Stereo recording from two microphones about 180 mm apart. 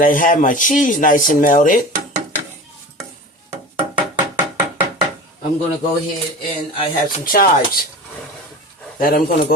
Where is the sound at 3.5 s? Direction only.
10° right (ahead or behind).